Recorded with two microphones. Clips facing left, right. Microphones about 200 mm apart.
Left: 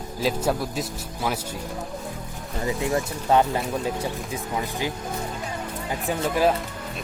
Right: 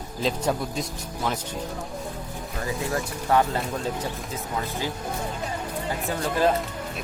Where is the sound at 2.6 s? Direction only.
20° left (ahead or behind).